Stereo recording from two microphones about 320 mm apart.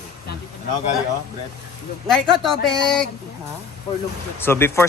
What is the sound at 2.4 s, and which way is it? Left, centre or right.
Music, centre.